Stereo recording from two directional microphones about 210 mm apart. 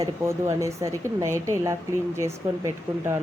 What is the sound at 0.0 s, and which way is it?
A woman's voice, 15° right (ahead or behind).